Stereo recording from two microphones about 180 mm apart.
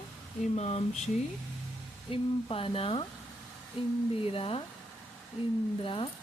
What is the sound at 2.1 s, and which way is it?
Speech, 30° left (ahead or behind).